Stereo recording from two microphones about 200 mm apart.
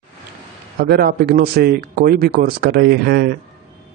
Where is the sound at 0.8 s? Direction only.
50° right (ahead or behind).